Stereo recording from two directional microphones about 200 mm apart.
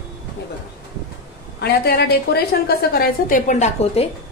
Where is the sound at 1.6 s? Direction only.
55° left (ahead or behind); by 4.1 s 35° left (ahead or behind).